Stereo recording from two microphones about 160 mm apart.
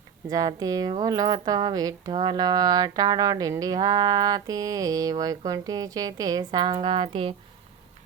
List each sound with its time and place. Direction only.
0.3 s a woman's voice: 20° right (ahead or behind)